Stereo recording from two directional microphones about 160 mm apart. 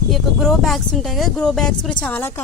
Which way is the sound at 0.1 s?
Centre (ahead or behind).